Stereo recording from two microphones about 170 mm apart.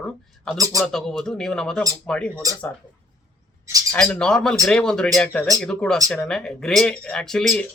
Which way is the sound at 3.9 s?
5° left (ahead or behind).